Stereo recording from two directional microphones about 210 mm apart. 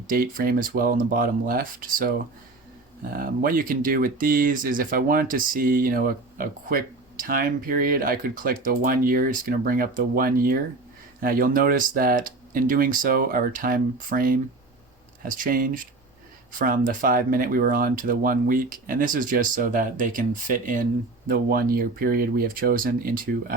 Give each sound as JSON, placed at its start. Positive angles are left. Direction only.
{"t": 0.1, "sound": "speech", "side_deg": -45}